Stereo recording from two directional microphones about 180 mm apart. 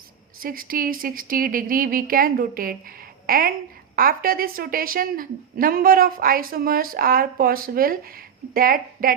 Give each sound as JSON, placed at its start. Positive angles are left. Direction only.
{"t": 0.3, "sound": "a woman's voice", "side_deg": -55}